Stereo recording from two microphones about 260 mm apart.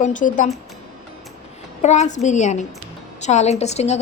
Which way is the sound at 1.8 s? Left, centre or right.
Left.